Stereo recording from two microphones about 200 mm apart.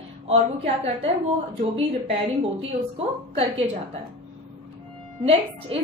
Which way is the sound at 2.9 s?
30° right (ahead or behind).